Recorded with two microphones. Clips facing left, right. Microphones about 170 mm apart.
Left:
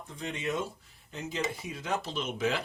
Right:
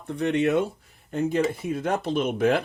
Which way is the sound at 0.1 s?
65° right (ahead or behind).